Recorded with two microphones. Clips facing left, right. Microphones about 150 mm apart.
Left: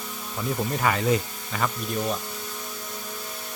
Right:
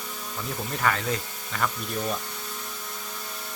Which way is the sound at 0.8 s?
10° left (ahead or behind).